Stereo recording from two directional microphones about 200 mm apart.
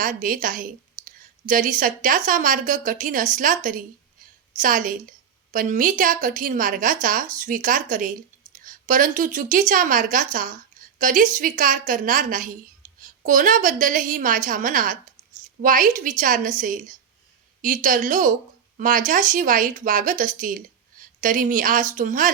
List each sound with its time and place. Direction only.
0.0 s a woman's voice: 45° right (ahead or behind)